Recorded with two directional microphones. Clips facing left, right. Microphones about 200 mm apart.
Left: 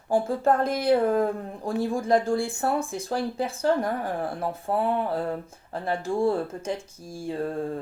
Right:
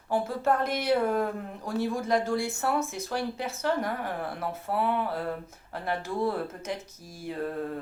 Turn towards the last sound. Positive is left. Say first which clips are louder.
# left 3 dB
turn(degrees=30)  # may be behind; listen again after turning